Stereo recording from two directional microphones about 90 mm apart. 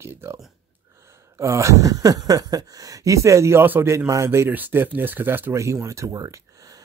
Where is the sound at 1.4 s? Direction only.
35° right (ahead or behind).